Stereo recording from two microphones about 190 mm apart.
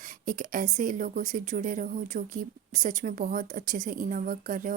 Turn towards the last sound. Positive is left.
turn(degrees=-45)  # may be behind; listen again after turning